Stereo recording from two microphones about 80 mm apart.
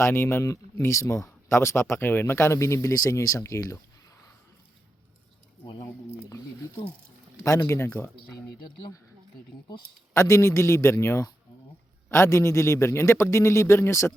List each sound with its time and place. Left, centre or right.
0.0 s speech: left
5.6 s speech: left
10.2 s speech: left